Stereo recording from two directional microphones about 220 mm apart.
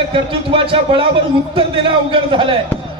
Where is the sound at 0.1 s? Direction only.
25° right (ahead or behind).